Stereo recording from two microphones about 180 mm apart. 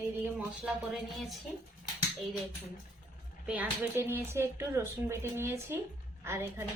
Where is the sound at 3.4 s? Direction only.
10° right (ahead or behind).